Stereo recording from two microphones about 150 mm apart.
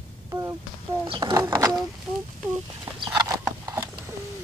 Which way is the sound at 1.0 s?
30° right (ahead or behind).